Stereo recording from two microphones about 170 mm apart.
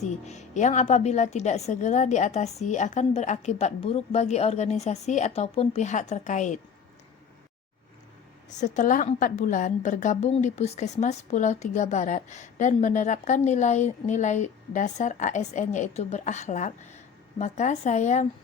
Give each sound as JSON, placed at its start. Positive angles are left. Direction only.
{"t": 0.0, "sound": "a woman's voice", "side_deg": 40}
{"t": 8.4, "sound": "a woman's voice", "side_deg": 45}